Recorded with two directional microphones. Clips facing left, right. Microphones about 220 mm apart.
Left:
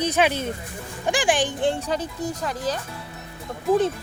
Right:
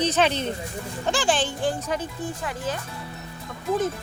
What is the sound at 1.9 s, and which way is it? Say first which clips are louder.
Speech: left 2 dB; 40° left (ahead or behind).